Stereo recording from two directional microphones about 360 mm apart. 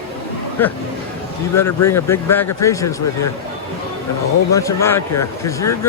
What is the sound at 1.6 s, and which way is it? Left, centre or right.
A man's voice, centre.